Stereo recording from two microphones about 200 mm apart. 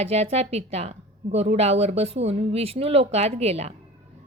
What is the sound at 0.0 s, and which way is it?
A woman's voice, 30° right (ahead or behind).